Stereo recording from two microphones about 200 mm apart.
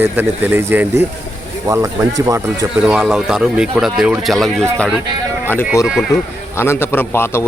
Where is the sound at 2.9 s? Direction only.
Centre (ahead or behind).